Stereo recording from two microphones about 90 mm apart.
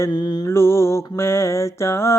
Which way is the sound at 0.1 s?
50° left (ahead or behind).